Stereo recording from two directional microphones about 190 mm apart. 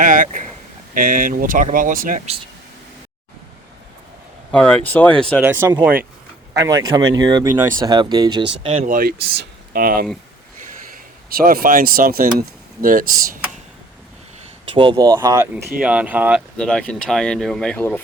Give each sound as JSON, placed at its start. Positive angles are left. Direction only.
{"t": 0.0, "sound": "speech", "side_deg": -45}
{"t": 4.5, "sound": "speech", "side_deg": 10}
{"t": 5.4, "sound": "speech", "side_deg": -15}
{"t": 8.6, "sound": "speech", "side_deg": -35}
{"t": 9.0, "sound": "speech", "side_deg": -55}
{"t": 11.3, "sound": "speech", "side_deg": -50}
{"t": 14.6, "sound": "speech", "side_deg": -25}
{"t": 15.8, "sound": "speech", "side_deg": -5}
{"t": 16.6, "sound": "speech", "side_deg": 5}